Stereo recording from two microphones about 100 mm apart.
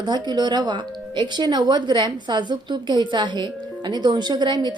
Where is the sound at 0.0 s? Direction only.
45° right (ahead or behind).